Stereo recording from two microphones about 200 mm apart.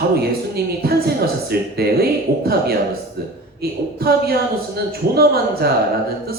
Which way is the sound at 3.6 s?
50° right (ahead or behind).